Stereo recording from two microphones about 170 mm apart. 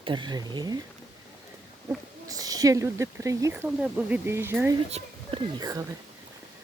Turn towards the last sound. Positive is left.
turn(degrees=-20)  # may be behind; listen again after turning